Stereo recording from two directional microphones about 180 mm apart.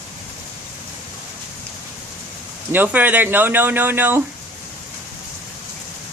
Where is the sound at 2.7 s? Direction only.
10° right (ahead or behind).